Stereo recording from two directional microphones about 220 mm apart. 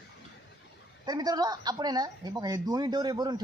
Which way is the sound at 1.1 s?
15° right (ahead or behind).